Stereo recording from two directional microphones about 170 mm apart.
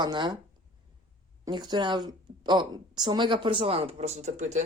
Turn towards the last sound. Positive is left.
turn(degrees=-45)  # may be behind; listen again after turning